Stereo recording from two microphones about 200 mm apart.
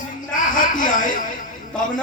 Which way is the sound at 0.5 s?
40° left (ahead or behind).